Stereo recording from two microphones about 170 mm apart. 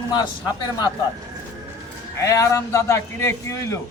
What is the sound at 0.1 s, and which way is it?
Speech, 25° left (ahead or behind).